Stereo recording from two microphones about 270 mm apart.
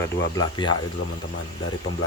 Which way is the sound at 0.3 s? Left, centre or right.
Centre.